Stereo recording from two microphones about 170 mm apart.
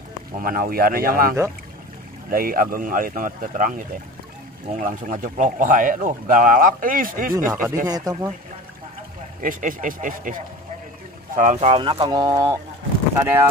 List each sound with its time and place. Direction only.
0.4 s a man's voice: 55° right (ahead or behind)
7.7 s speech: 20° right (ahead or behind)
9.4 s a man's voice: 50° right (ahead or behind); by 13.5 s 15° right (ahead or behind)